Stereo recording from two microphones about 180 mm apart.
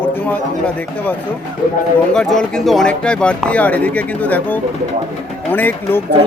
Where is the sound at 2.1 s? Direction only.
Centre (ahead or behind).